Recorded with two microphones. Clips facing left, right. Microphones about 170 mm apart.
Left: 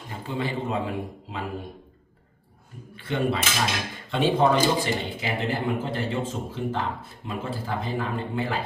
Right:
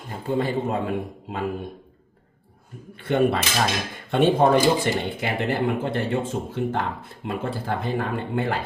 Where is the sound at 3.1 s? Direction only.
60° right (ahead or behind).